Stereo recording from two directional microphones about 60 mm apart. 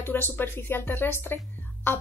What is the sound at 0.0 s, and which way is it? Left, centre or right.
A woman's voice, left.